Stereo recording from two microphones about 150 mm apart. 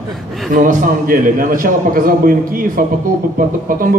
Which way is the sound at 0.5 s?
60° right (ahead or behind).